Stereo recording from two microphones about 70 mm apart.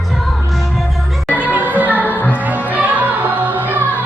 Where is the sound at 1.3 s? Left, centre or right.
Right.